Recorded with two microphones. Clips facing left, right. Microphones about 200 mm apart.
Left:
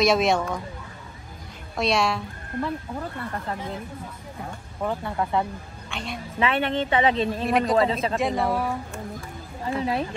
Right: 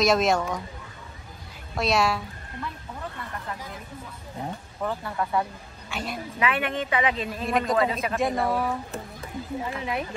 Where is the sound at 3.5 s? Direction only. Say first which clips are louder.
Left 6 dB; 30° left (ahead or behind).